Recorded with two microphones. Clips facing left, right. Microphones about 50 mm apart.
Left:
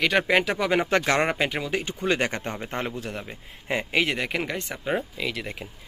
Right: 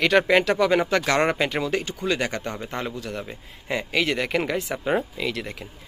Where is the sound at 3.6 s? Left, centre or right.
Left.